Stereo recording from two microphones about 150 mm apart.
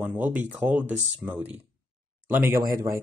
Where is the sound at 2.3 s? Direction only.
15° right (ahead or behind).